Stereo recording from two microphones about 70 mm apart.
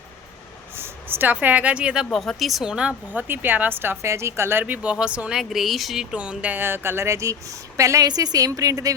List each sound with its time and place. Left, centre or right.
0.8 s speech: right; by 2.0 s centre
2.1 s speech: centre
3.1 s speech: right
4.6 s speech: centre
5.4 s speech: centre
6.1 s a woman's voice: right
8.0 s a woman's voice: right